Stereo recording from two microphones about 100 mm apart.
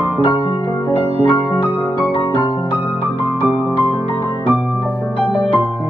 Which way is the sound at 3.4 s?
20° right (ahead or behind).